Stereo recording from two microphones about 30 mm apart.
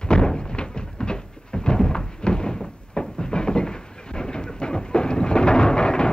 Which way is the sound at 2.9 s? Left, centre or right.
Left.